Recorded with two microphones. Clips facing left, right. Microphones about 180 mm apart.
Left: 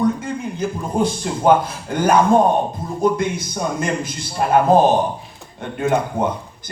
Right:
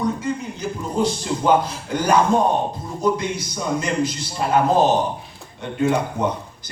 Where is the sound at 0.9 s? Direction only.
55° left (ahead or behind).